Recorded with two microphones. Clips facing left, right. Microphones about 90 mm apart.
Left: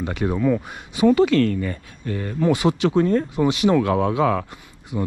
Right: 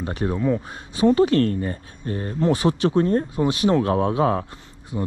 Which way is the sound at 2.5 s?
15° left (ahead or behind).